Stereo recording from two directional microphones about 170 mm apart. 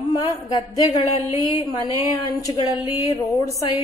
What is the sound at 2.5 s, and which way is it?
Speech, 30° left (ahead or behind).